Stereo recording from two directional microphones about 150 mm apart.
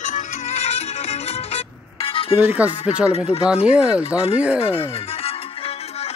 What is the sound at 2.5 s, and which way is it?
Speech, 10° right (ahead or behind).